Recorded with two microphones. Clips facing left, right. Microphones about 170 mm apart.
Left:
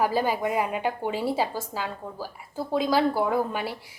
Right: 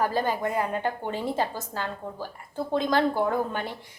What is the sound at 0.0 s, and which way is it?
A woman's voice, 10° left (ahead or behind).